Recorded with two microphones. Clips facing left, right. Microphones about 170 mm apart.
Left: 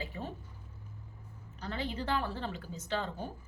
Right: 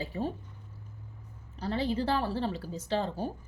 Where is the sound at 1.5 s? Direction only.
35° right (ahead or behind).